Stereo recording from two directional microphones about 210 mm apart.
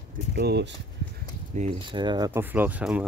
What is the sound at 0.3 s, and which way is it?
Speech, 50° right (ahead or behind).